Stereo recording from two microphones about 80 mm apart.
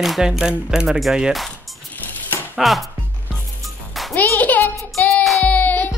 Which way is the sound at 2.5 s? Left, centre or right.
Centre.